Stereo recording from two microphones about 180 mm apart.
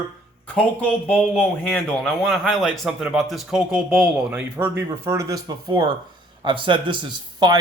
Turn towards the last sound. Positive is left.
turn(degrees=-25)  # may be behind; listen again after turning